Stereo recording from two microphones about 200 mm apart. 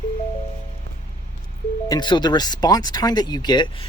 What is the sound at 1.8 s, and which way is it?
Speech, 20° left (ahead or behind).